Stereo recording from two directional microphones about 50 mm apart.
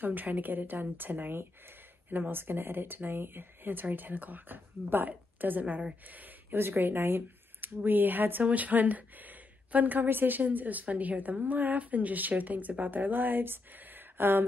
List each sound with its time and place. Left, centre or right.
0.0 s speech: right
6.5 s speech: right